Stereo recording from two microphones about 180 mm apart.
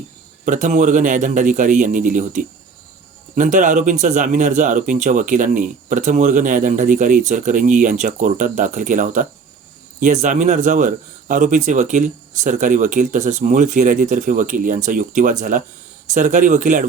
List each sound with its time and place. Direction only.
0.4 s speech: 45° right (ahead or behind)